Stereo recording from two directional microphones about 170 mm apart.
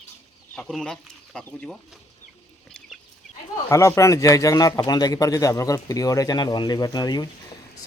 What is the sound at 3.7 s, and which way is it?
Speech, 15° left (ahead or behind).